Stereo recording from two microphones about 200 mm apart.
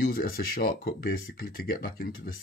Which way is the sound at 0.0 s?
45° left (ahead or behind).